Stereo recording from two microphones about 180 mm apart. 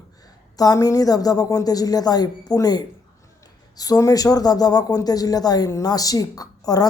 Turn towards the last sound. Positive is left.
turn(degrees=20)  # may be behind; listen again after turning